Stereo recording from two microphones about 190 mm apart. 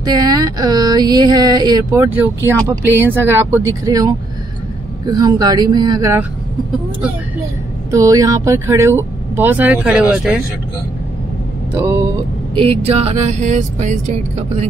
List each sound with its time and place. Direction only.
0.0 s speech: 20° right (ahead or behind)
7.9 s speech: 15° right (ahead or behind)
11.7 s speech: 15° right (ahead or behind)
12.5 s speech: 30° right (ahead or behind)